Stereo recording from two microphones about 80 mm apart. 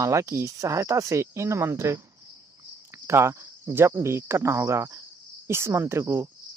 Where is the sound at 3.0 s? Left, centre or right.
Right.